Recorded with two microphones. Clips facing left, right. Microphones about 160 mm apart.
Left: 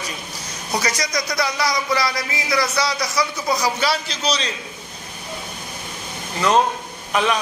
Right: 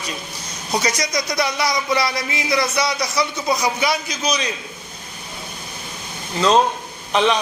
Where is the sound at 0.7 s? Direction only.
20° right (ahead or behind).